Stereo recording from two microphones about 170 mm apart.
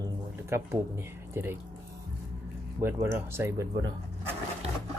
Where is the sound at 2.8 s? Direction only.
15° right (ahead or behind).